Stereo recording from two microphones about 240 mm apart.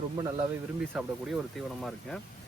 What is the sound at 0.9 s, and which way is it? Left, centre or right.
Speech, centre.